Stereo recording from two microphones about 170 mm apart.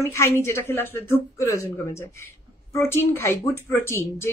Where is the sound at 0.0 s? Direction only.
15° left (ahead or behind).